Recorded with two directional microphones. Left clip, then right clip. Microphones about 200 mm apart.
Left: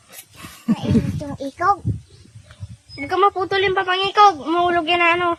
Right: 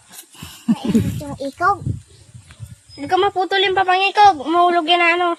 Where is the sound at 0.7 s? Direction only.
10° right (ahead or behind).